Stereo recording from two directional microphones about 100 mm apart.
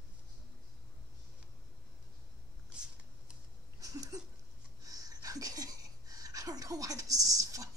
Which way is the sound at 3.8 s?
35° right (ahead or behind).